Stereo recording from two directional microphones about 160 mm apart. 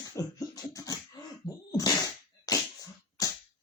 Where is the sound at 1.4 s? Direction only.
20° left (ahead or behind).